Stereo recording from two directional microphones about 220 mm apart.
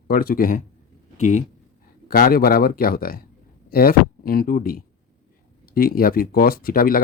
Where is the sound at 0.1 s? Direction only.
40° left (ahead or behind).